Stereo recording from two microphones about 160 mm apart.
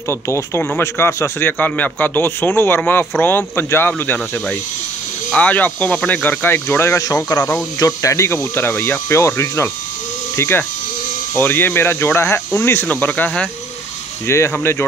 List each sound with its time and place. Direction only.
0.1 s a man's voice: 15° left (ahead or behind)